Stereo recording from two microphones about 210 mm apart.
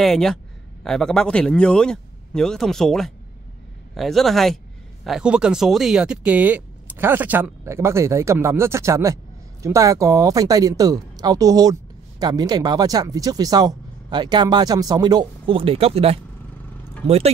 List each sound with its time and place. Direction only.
0.0 s speech: centre (ahead or behind); by 17.3 s 30° right (ahead or behind)